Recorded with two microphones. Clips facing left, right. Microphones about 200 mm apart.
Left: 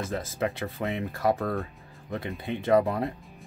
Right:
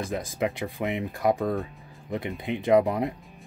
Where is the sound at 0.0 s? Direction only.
15° right (ahead or behind).